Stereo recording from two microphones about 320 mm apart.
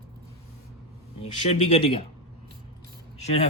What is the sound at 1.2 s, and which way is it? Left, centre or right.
Speech, centre.